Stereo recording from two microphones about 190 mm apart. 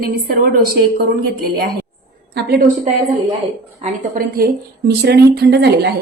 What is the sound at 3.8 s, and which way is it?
A woman's voice, 45° right (ahead or behind).